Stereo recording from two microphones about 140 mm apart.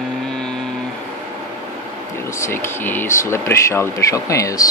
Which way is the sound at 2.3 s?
20° left (ahead or behind).